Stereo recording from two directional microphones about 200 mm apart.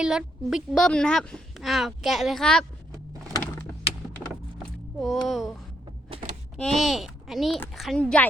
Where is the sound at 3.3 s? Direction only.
15° left (ahead or behind).